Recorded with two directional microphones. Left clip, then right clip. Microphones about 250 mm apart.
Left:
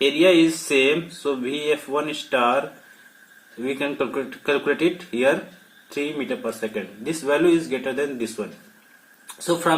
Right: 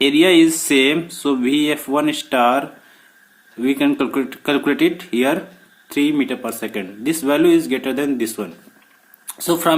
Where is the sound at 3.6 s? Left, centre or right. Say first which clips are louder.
Right 6 dB; right.